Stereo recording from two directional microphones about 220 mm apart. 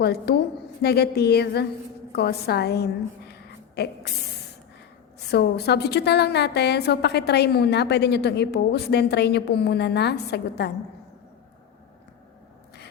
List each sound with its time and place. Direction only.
0.0 s a woman's voice: 45° left (ahead or behind)
5.3 s a woman's voice: 45° left (ahead or behind)